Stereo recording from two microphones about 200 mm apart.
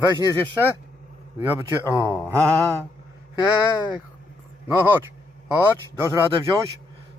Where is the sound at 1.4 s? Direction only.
10° right (ahead or behind).